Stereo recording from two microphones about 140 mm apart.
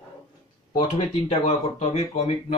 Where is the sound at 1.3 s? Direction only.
50° left (ahead or behind).